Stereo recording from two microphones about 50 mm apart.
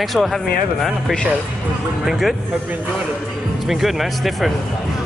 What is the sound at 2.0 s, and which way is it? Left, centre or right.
Speech, centre.